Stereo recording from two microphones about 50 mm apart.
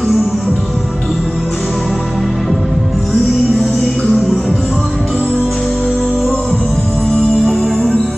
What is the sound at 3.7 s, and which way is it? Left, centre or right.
Music, centre.